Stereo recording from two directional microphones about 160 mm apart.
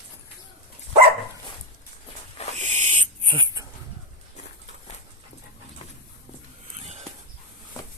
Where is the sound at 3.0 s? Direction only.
35° right (ahead or behind).